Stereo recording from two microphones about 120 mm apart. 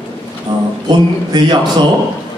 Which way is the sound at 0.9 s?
35° right (ahead or behind).